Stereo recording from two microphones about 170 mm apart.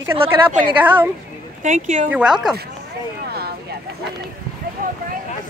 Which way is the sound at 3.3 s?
65° right (ahead or behind).